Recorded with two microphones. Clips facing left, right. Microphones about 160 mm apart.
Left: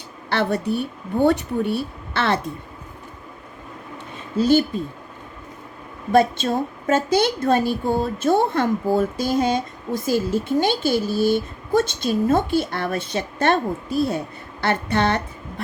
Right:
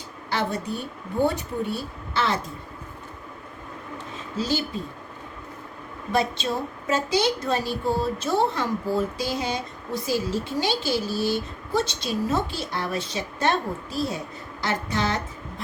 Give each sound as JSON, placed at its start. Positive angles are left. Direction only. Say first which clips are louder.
{"t": 0.3, "sound": "a woman's voice", "louder": "left 6 dB", "side_deg": 65}
{"t": 6.1, "sound": "a woman's voice", "louder": "left 7 dB", "side_deg": 50}